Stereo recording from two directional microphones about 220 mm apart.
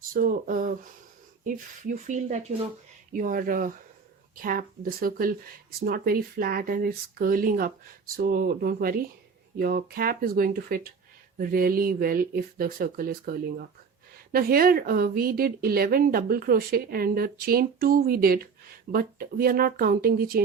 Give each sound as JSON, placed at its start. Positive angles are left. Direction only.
{"t": 0.1, "sound": "speech", "side_deg": -40}
{"t": 2.0, "sound": "speech", "side_deg": -35}